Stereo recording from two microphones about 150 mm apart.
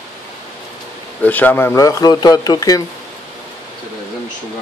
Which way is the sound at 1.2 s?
10° left (ahead or behind).